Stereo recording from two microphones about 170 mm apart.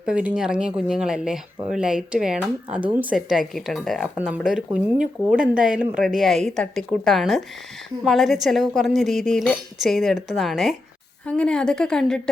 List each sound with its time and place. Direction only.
0.0 s speech: 5° right (ahead or behind)
4.9 s speech: 50° right (ahead or behind)
5.5 s speech: 5° right (ahead or behind)